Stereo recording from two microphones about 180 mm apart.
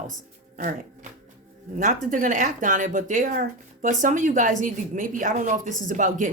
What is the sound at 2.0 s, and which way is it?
Speech, 45° right (ahead or behind).